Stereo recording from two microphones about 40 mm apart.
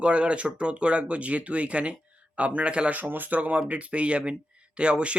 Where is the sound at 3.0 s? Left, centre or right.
Right.